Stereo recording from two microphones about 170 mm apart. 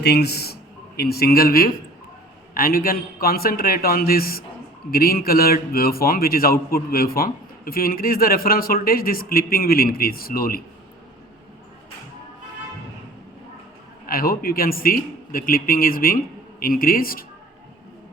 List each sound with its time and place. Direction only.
0.0 s a man's voice: 75° left (ahead or behind)
14.1 s a man's voice: 60° left (ahead or behind)